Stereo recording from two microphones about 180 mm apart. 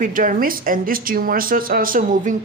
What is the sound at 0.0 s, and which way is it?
Speech, 50° right (ahead or behind).